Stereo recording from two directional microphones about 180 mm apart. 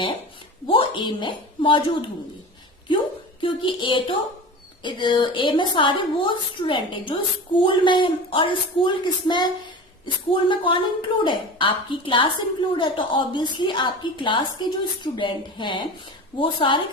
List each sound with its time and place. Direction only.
0.7 s speech: 25° left (ahead or behind)
3.4 s speech: 25° left (ahead or behind)